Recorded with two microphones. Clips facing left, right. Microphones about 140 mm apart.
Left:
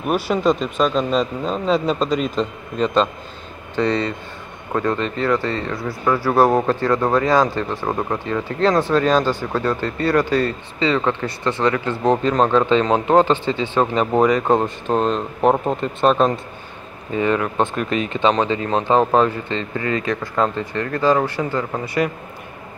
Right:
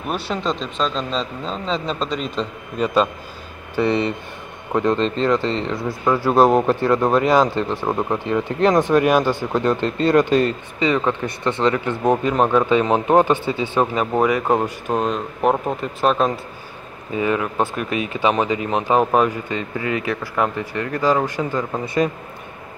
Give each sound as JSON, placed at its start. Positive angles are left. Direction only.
{"t": 0.0, "sound": "speech", "side_deg": 5}
{"t": 2.8, "sound": "speech", "side_deg": -10}